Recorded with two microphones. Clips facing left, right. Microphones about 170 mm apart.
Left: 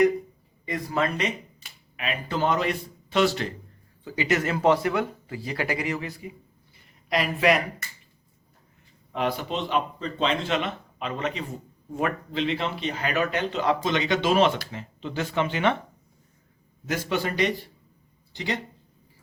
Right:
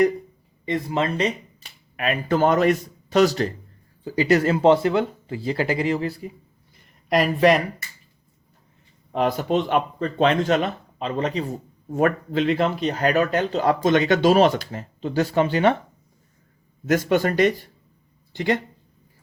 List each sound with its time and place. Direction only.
0.6 s speech: 25° right (ahead or behind)
2.0 s speech: 50° right (ahead or behind)
9.1 s speech: 40° right (ahead or behind)
11.9 s speech: 45° right (ahead or behind)
16.8 s speech: 50° right (ahead or behind)